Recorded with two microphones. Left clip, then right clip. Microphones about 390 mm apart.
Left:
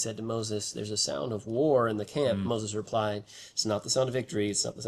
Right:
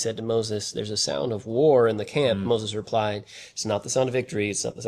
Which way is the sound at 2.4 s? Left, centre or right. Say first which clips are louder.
Right 7 dB; right.